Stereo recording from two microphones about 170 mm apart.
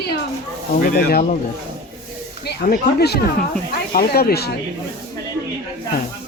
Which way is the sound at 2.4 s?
70° left (ahead or behind).